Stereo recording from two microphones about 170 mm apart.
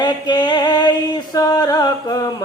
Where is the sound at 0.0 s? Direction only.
25° left (ahead or behind).